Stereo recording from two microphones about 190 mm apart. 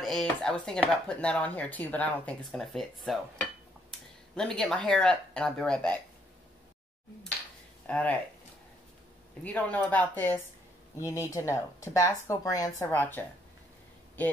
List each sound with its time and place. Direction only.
0.0 s speech: centre (ahead or behind)
7.8 s speech: 10° left (ahead or behind)
9.4 s speech: 10° left (ahead or behind)